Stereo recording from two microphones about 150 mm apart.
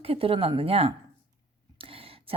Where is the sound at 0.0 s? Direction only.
40° right (ahead or behind).